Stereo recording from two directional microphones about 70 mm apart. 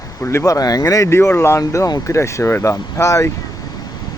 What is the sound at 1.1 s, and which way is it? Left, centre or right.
Speech, left.